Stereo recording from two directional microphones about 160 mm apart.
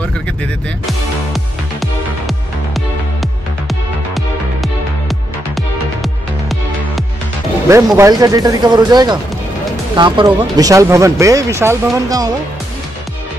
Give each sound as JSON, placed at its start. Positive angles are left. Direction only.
{"t": 1.3, "sound": "music", "side_deg": 0}
{"t": 7.6, "sound": "speech", "side_deg": -20}